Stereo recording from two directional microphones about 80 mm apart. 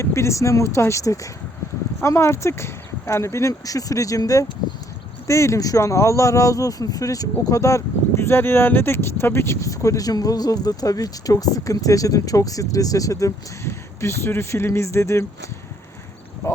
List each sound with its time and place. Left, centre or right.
0.0 s speech: left